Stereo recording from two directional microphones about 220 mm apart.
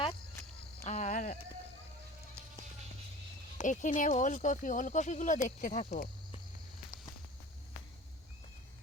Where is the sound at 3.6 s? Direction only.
35° left (ahead or behind).